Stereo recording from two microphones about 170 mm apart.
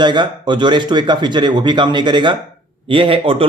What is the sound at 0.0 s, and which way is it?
Speech, 25° right (ahead or behind).